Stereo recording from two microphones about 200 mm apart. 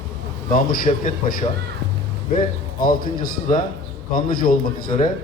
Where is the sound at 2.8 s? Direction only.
45° left (ahead or behind).